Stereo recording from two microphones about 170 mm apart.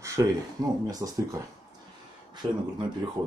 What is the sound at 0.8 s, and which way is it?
Speech, 20° right (ahead or behind).